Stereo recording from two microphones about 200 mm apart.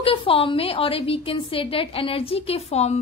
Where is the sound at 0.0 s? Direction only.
25° left (ahead or behind).